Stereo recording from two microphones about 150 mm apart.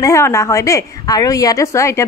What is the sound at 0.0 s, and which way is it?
A woman's voice, 20° left (ahead or behind).